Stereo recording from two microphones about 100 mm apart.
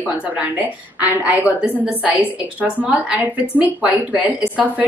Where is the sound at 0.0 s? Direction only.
15° right (ahead or behind).